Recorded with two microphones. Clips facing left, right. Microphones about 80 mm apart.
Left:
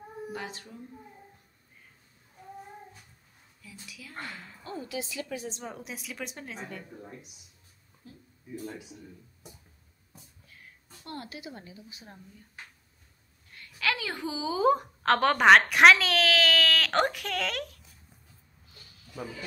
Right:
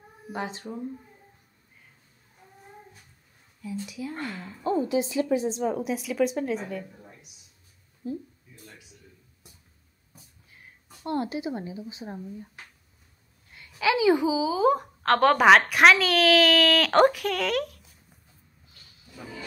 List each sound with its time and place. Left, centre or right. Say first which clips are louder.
0.3 s a woman's voice: right 10 dB; right
3.6 s a woman's voice: right 15 dB; right
4.3 s speech: right 6 dB; centre
4.6 s a woman's voice: right 12 dB; right
5.5 s a woman's voice: right 13 dB; centre
8.0 s speech: right 19 dB; right
11.1 s a woman's voice: right 12 dB; right
13.5 s a woman's voice: right 6 dB; centre